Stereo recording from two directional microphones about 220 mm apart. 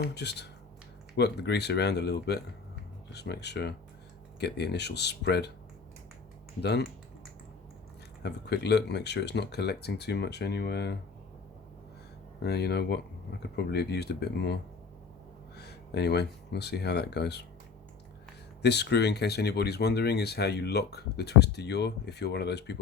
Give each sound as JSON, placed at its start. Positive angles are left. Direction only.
{"t": 0.0, "sound": "speech", "side_deg": 50}
{"t": 6.6, "sound": "speech", "side_deg": 50}
{"t": 8.2, "sound": "speech", "side_deg": 50}
{"t": 12.4, "sound": "speech", "side_deg": 50}
{"t": 18.6, "sound": "speech", "side_deg": 50}